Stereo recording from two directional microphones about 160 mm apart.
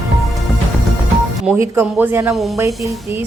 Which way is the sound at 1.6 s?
10° right (ahead or behind).